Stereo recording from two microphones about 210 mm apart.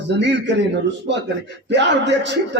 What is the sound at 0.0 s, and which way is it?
A man's voice, 55° right (ahead or behind).